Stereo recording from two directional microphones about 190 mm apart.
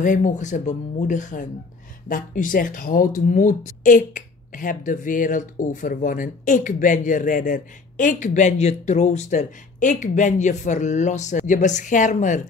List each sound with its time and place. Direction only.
0.0 s speech: 45° left (ahead or behind)